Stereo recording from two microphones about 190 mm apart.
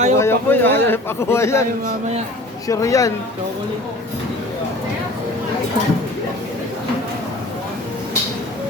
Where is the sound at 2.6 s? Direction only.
15° left (ahead or behind).